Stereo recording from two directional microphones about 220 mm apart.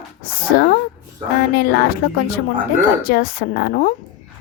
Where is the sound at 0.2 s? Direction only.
45° left (ahead or behind).